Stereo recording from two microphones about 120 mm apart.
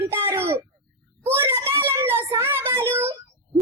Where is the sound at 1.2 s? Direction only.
20° right (ahead or behind).